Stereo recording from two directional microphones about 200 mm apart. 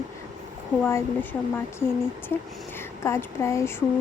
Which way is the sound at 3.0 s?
15° left (ahead or behind).